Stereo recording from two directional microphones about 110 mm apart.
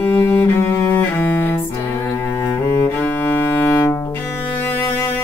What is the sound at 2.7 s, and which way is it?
Cello, 20° left (ahead or behind).